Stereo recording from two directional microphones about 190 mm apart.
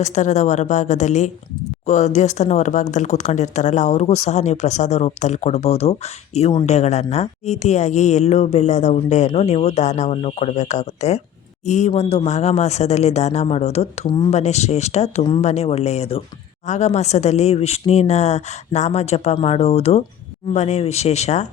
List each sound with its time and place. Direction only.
0.0 s speech: 40° left (ahead or behind)